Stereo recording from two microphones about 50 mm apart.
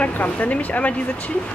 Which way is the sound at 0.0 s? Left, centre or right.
Left.